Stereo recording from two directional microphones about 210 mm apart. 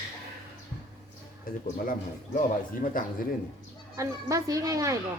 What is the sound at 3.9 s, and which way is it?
A woman's voice, 15° right (ahead or behind).